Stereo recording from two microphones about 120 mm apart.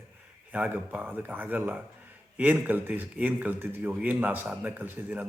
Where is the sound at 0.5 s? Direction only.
15° right (ahead or behind).